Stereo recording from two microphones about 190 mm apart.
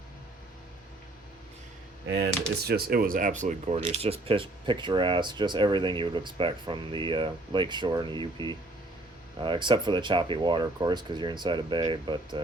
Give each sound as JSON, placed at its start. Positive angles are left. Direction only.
{"t": 2.0, "sound": "speech", "side_deg": -60}